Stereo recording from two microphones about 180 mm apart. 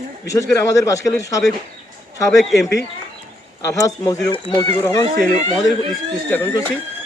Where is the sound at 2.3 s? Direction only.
Centre (ahead or behind).